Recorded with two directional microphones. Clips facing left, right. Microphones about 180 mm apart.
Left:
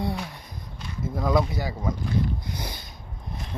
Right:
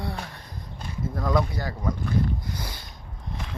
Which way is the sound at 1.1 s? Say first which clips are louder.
Left 2 dB; 10° left (ahead or behind).